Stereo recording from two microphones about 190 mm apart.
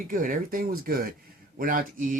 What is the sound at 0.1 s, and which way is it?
Speech, 45° right (ahead or behind).